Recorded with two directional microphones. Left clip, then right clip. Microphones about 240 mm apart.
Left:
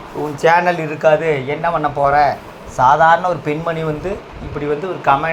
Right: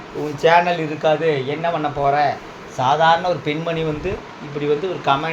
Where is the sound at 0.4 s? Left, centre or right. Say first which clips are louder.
Left 2 dB; centre.